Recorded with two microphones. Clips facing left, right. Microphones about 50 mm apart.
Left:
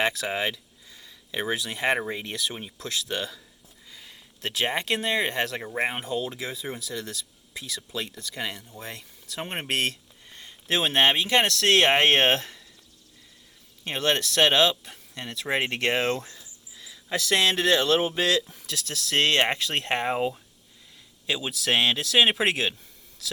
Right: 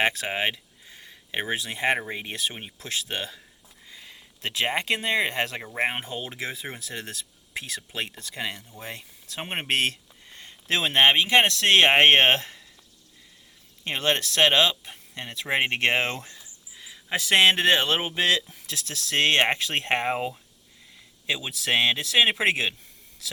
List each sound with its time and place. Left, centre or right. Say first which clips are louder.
0.0 s speech: right 1 dB; right
2.3 s speech: even; right
4.4 s speech: right 1 dB; right
6.0 s speech: left 3 dB; right
8.8 s a sound: right 1 dB; right
10.8 s speech: right 3 dB; right
13.8 s speech: even; right
21.2 s speech: left 1 dB; right